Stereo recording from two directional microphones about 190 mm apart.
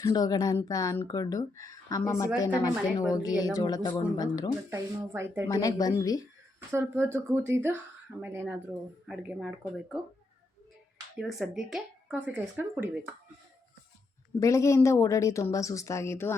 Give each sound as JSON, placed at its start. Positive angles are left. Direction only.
{"t": 0.0, "sound": "speech", "side_deg": 20}
{"t": 4.7, "sound": "speech", "side_deg": -15}
{"t": 5.5, "sound": "speech", "side_deg": 20}
{"t": 6.7, "sound": "speech", "side_deg": -10}
{"t": 11.2, "sound": "speech", "side_deg": 0}
{"t": 14.3, "sound": "a woman's voice", "side_deg": 15}